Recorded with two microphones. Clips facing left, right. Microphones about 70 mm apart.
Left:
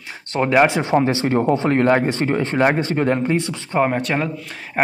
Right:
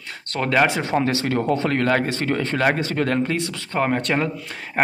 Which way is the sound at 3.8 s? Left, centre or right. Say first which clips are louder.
Even; centre.